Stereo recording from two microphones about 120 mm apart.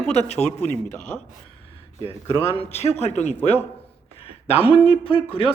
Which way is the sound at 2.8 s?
65° left (ahead or behind).